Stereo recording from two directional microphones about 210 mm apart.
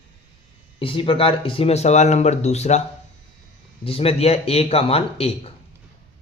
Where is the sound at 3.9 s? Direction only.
25° left (ahead or behind).